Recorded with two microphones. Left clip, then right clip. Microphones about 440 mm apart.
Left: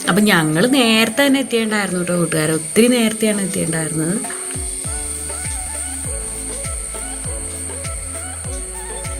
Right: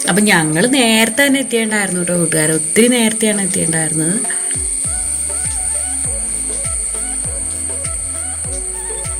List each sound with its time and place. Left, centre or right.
0.0 s a woman's voice: left